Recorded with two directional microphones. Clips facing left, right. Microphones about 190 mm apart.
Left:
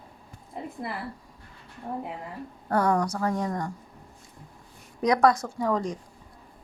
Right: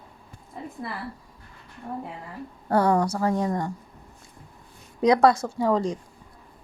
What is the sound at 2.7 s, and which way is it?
A woman's voice, 30° right (ahead or behind).